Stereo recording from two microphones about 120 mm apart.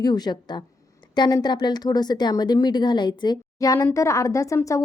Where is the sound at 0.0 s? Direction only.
35° left (ahead or behind).